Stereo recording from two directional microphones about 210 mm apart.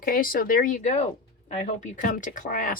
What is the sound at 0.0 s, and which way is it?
Speech, 45° left (ahead or behind).